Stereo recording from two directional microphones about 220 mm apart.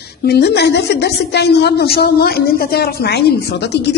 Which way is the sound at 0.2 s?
45° left (ahead or behind).